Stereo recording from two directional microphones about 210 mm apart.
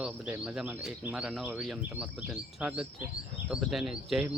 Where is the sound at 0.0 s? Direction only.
5° right (ahead or behind).